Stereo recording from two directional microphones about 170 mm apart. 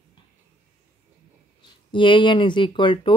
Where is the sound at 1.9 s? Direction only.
30° left (ahead or behind).